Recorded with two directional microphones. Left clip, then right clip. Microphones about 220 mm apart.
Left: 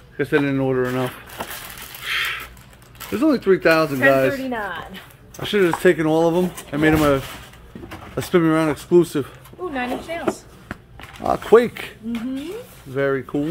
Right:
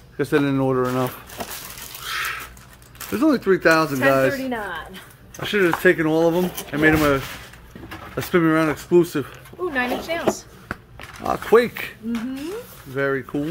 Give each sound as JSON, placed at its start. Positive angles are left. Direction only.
{"t": 0.2, "sound": "speech", "side_deg": -15}
{"t": 2.1, "sound": "a sound", "side_deg": 0}
{"t": 3.1, "sound": "speech", "side_deg": 0}
{"t": 5.4, "sound": "speech", "side_deg": 10}
{"t": 8.2, "sound": "speech", "side_deg": 10}
{"t": 9.7, "sound": "speech", "side_deg": -15}
{"t": 10.7, "sound": "a sound", "side_deg": 10}
{"t": 12.9, "sound": "speech", "side_deg": 10}